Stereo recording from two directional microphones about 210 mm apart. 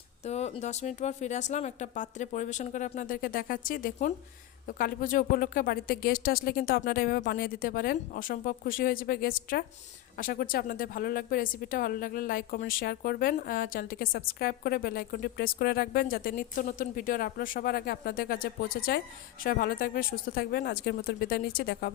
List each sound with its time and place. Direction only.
0.3 s a woman's voice: 30° left (ahead or behind); by 21.9 s 50° left (ahead or behind)